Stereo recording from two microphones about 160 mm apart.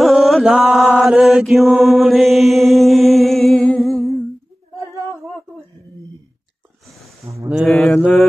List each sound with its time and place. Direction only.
0.0 s mantra: centre (ahead or behind)
7.4 s mantra: 10° right (ahead or behind)
7.7 s mantra: 5° left (ahead or behind)